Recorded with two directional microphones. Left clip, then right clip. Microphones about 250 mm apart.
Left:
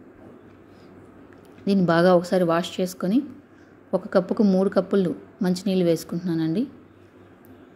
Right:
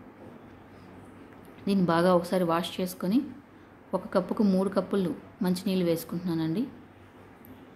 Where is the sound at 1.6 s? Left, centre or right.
Centre.